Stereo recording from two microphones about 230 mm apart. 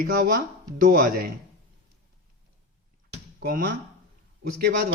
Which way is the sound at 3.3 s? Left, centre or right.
Right.